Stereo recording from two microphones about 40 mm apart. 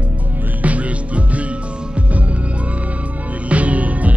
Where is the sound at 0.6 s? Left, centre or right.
Right.